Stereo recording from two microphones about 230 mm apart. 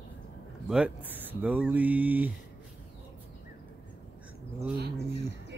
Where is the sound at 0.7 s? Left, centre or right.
Centre.